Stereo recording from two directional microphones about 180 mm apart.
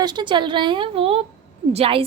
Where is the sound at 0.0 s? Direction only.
25° right (ahead or behind).